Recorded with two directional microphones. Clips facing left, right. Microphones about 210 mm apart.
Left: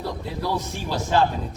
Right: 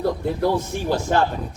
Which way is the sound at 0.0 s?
50° right (ahead or behind).